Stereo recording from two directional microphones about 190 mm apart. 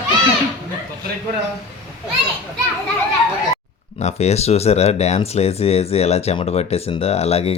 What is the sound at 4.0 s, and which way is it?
Speech, 35° left (ahead or behind).